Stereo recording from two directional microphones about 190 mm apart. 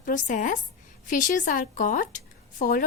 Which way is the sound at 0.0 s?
45° left (ahead or behind).